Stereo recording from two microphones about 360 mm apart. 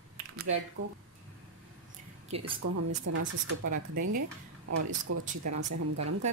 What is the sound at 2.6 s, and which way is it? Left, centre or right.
Speech, right.